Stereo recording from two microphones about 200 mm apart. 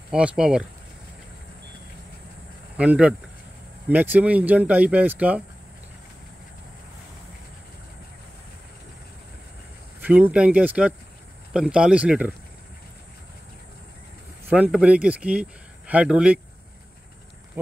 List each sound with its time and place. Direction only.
0.1 s speech: 5° right (ahead or behind)
2.8 s speech: 5° right (ahead or behind)
9.9 s speech: 10° right (ahead or behind)
14.5 s speech: 5° right (ahead or behind)